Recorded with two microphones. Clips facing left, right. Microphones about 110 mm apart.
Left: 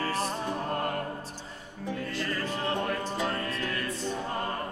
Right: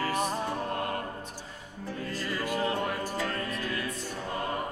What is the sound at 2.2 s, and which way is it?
Music, 10° right (ahead or behind).